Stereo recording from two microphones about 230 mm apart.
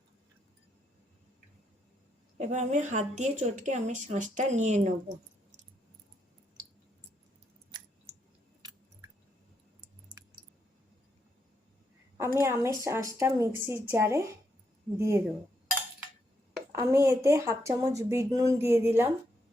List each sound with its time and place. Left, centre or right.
2.4 s a woman's voice: right
12.1 s a woman's voice: centre
16.7 s speech: centre